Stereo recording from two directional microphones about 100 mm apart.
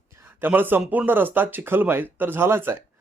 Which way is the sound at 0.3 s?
20° right (ahead or behind).